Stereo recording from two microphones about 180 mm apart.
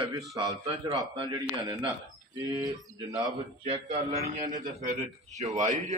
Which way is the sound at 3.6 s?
40° right (ahead or behind).